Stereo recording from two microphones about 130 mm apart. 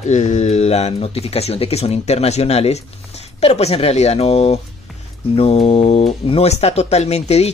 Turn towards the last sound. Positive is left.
turn(degrees=55)  # may be behind; listen again after turning